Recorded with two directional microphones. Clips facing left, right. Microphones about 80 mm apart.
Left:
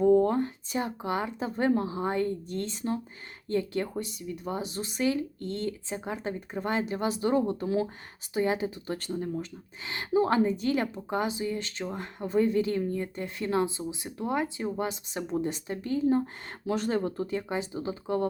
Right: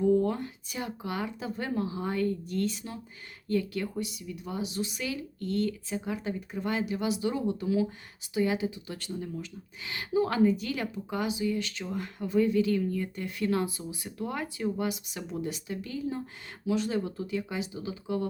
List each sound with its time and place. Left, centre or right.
0.0 s speech: left